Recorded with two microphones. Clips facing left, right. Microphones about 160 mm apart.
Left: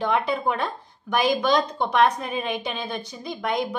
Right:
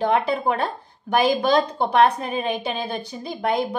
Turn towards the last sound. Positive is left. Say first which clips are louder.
# right 3 dB
turn(degrees=-30)  # may be behind; listen again after turning